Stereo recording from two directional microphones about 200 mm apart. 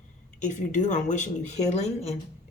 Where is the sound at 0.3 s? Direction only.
40° left (ahead or behind).